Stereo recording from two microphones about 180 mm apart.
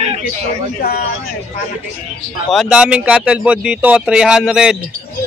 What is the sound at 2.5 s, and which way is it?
Speech, centre (ahead or behind).